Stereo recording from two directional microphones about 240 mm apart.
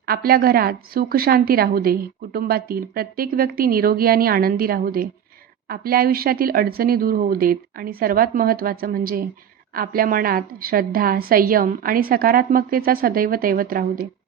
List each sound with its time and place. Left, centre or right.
0.0 s a woman's voice: right